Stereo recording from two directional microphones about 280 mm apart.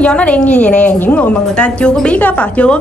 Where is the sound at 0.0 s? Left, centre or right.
Centre.